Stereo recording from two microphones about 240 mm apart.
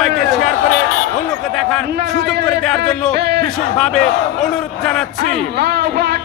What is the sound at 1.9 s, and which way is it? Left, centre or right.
Speech, right.